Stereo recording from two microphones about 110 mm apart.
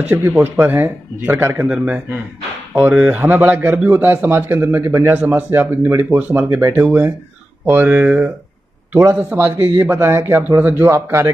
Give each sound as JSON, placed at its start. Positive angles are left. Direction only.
{"t": 0.1, "sound": "a man's voice", "side_deg": -20}